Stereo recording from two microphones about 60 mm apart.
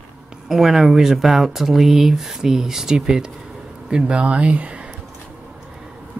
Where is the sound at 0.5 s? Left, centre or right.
Centre; by 4.8 s right.